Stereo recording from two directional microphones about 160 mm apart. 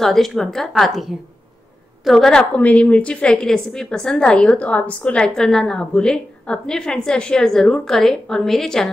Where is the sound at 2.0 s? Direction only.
Centre (ahead or behind).